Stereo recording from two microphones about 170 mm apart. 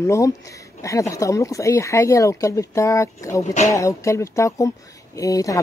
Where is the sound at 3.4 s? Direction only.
45° left (ahead or behind).